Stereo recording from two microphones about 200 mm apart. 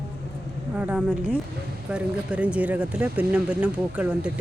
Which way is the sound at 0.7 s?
5° right (ahead or behind).